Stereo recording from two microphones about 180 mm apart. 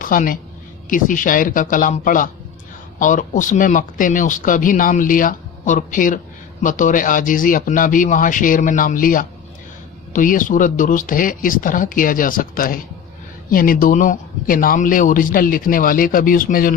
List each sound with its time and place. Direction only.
0.0 s a woman's voice: 50° left (ahead or behind)